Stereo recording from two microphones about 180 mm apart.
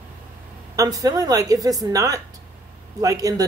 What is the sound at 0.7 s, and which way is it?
A woman's voice, 20° right (ahead or behind).